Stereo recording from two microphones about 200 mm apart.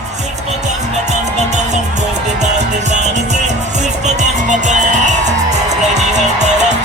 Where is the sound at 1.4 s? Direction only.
35° right (ahead or behind).